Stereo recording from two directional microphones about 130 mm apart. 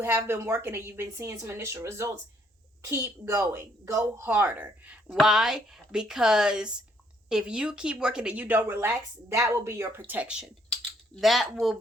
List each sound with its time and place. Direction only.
0.0 s a woman's voice: 20° right (ahead or behind)
10.1 s speech: 10° right (ahead or behind)